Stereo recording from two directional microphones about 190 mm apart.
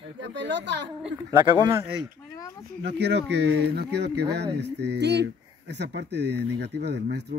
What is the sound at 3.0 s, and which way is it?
Speech, 65° right (ahead or behind).